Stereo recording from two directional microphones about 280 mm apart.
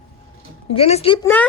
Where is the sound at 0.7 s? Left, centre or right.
Left.